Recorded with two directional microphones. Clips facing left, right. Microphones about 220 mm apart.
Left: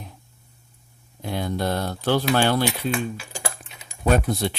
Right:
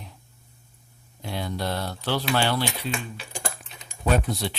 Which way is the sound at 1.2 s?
50° left (ahead or behind).